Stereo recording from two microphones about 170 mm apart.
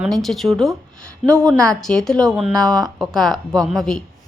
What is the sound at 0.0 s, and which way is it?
A woman's voice, centre (ahead or behind).